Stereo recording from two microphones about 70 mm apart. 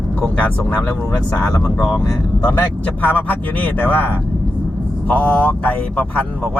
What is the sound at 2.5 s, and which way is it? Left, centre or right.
Speech, left.